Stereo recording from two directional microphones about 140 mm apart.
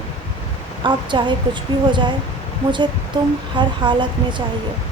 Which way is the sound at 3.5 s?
35° right (ahead or behind).